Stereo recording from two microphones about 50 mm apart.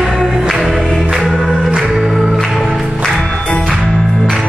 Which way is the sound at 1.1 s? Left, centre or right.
Centre.